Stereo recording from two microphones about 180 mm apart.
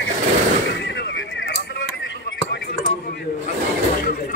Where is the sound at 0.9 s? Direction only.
75° left (ahead or behind).